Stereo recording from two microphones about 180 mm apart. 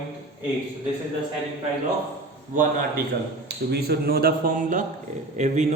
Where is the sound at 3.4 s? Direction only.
60° right (ahead or behind).